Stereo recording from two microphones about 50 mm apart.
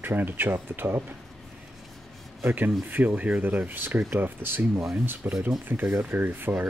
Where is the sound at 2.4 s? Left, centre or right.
Right.